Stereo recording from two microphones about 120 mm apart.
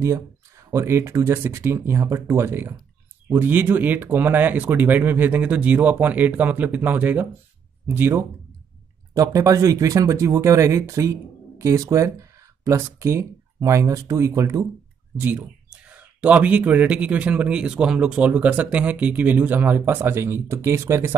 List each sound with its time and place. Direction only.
0.7 s speech: 20° right (ahead or behind)
15.1 s speech: 15° right (ahead or behind)